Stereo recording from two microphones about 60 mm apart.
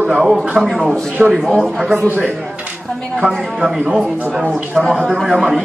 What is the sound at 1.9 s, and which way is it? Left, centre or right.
Speech, right.